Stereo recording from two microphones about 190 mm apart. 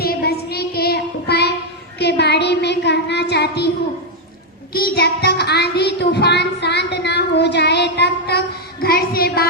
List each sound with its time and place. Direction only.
0.0 s child singing: 55° left (ahead or behind)
4.7 s child singing: 55° left (ahead or behind)